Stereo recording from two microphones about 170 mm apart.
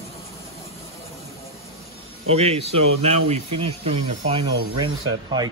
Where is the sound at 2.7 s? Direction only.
40° right (ahead or behind).